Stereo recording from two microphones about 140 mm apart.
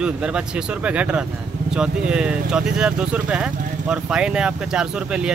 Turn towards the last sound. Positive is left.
turn(degrees=-5)  # may be behind; listen again after turning